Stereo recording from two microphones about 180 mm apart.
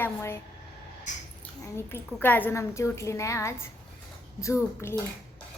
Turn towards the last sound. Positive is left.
turn(degrees=15)  # may be behind; listen again after turning